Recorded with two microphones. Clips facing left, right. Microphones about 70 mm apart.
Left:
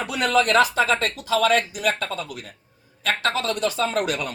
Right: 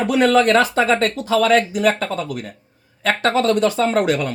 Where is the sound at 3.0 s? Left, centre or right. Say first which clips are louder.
Right 7 dB; right.